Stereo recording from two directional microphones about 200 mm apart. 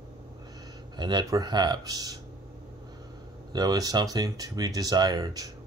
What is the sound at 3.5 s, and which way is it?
Speech, 20° right (ahead or behind).